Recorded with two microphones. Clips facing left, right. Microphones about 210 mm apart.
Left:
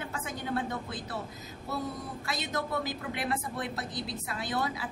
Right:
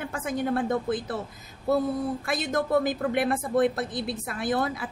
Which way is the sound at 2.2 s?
50° right (ahead or behind).